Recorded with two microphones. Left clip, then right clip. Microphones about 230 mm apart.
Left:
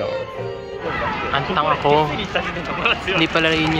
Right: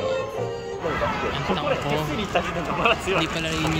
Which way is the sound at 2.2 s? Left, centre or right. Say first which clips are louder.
Left 2 dB; right.